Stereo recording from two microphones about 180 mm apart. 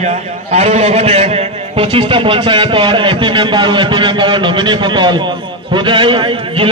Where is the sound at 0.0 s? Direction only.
40° right (ahead or behind).